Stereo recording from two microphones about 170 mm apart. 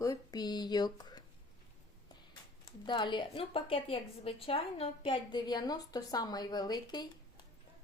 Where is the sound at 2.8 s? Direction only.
25° left (ahead or behind).